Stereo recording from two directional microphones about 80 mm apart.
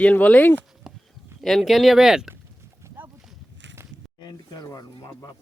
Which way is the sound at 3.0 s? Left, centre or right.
Right.